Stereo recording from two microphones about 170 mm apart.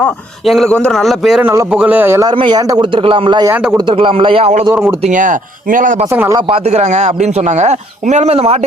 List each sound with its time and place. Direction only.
0.0 s a man's voice: centre (ahead or behind); by 2.3 s 15° right (ahead or behind)
2.3 s a man's voice: 30° right (ahead or behind)
3.5 s a man's voice: 10° right (ahead or behind)
3.8 s speech: 30° right (ahead or behind)
4.7 s a man's voice: 10° right (ahead or behind)
5.0 s speech: 50° right (ahead or behind)
6.1 s a man's voice: 15° right (ahead or behind)
6.5 s speech: 40° right (ahead or behind)